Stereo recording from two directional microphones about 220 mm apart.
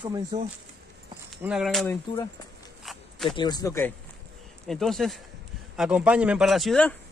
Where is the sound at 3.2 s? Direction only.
20° left (ahead or behind).